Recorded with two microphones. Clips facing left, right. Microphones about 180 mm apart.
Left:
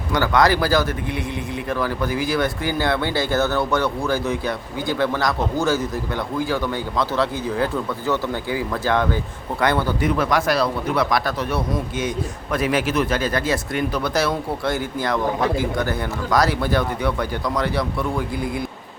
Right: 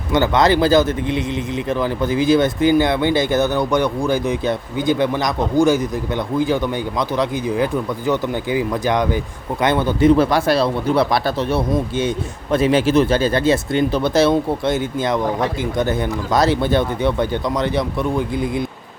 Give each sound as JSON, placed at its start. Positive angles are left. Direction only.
{"t": 0.1, "sound": "a man's voice", "side_deg": -25}
{"t": 7.2, "sound": "a man's voice", "side_deg": -15}